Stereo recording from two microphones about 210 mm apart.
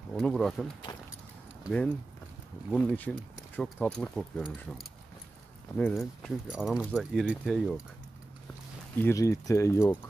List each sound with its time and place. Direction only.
0.1 s speech: centre (ahead or behind)
8.9 s speech: 10° left (ahead or behind)